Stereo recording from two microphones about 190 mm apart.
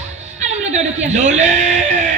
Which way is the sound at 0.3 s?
35° right (ahead or behind).